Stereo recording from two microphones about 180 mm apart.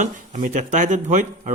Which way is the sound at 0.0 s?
40° right (ahead or behind).